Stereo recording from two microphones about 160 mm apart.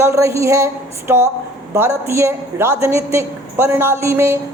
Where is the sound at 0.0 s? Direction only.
20° right (ahead or behind).